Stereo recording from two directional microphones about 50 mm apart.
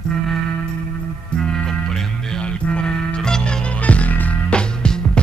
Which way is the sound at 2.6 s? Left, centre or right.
Centre.